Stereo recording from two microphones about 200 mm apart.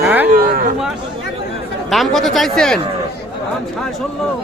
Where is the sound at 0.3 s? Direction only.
45° right (ahead or behind).